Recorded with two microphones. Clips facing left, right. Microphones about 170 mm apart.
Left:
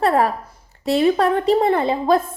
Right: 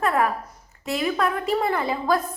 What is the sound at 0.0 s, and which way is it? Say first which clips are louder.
A woman's voice: left 5 dB; 35° left (ahead or behind).